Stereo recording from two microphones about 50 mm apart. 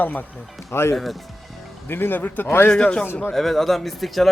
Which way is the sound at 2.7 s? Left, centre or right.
Centre.